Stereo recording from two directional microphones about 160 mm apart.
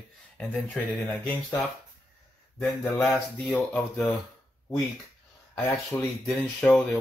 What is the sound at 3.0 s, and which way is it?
Speech, 5° left (ahead or behind).